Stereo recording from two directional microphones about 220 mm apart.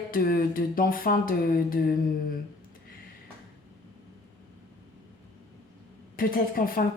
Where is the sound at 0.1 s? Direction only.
40° left (ahead or behind).